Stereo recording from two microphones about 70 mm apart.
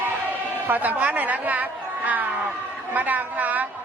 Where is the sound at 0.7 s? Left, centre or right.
Right.